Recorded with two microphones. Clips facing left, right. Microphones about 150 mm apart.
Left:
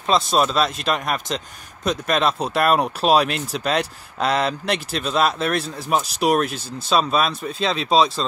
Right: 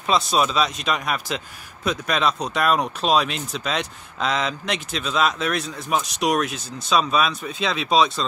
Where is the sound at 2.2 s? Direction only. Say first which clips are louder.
Left 2 dB; 5° left (ahead or behind).